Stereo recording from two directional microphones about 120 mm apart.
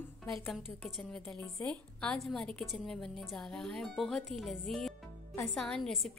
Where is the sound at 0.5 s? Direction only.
5° right (ahead or behind).